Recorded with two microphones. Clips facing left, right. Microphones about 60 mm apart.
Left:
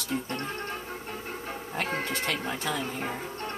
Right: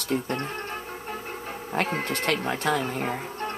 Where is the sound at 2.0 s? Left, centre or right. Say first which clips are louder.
Right 4 dB; right.